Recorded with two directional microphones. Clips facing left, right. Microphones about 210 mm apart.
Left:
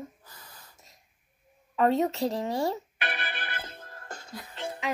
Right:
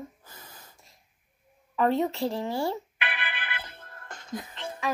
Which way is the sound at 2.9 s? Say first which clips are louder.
Left 1 dB; 40° left (ahead or behind).